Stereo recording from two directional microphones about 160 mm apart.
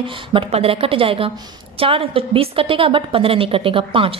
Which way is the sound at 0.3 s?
35° right (ahead or behind).